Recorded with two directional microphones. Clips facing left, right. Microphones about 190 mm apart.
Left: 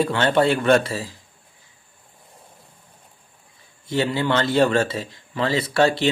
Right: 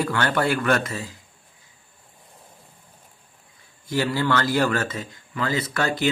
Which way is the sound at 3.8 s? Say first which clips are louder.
Left 1 dB; 25° left (ahead or behind).